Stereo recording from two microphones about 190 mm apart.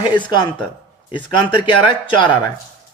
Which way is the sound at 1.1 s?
25° left (ahead or behind).